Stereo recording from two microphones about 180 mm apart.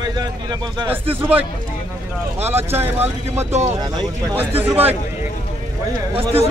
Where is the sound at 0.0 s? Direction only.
25° right (ahead or behind).